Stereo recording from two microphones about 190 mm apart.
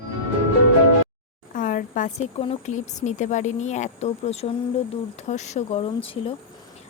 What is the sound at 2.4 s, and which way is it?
Speech, 35° left (ahead or behind).